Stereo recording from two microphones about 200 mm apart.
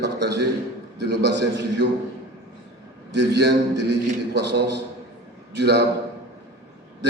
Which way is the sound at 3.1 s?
60° right (ahead or behind).